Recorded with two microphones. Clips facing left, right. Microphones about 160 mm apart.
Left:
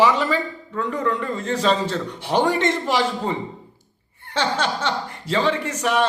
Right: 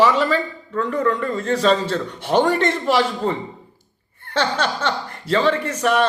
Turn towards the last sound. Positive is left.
turn(degrees=15)  # may be behind; listen again after turning